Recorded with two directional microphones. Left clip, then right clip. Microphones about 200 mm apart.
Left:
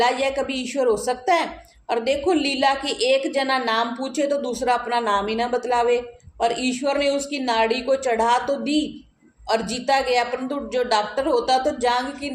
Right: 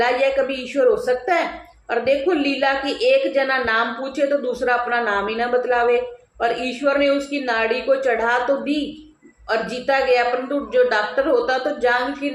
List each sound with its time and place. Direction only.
0.0 s a woman's voice: 40° left (ahead or behind)